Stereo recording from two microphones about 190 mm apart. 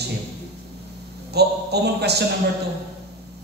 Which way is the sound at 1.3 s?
60° right (ahead or behind).